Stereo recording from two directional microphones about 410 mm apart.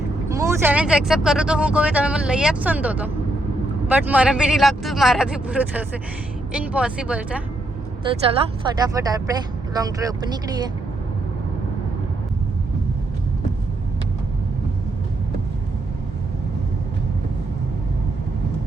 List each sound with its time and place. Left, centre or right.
0.3 s speech: centre
8.7 s speech: centre